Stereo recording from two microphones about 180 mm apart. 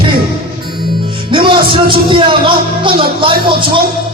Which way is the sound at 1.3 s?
25° right (ahead or behind).